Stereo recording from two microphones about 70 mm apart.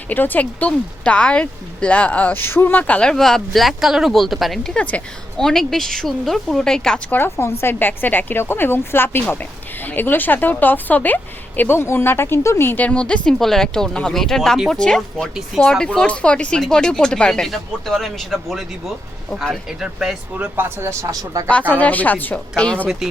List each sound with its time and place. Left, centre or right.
0.1 s a woman's voice: left
2.4 s speech: left; by 4.7 s centre
4.7 s a woman's voice: centre
5.4 s speech: centre
7.1 s a woman's voice: left
12.7 s speech: centre
15.5 s speech: centre
15.9 s speech: centre
19.8 s speech: centre
20.3 s speech: right
20.7 s a man's voice: right
21.1 s speech: right
21.7 s a woman's voice: left